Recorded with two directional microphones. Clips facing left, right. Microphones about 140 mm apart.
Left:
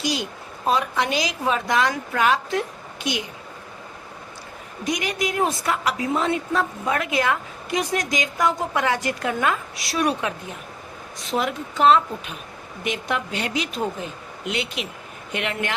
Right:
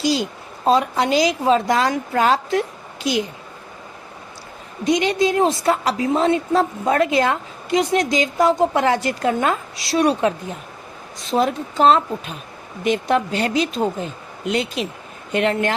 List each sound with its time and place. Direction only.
0.0 s speech: 30° right (ahead or behind)
4.8 s a woman's voice: 25° right (ahead or behind)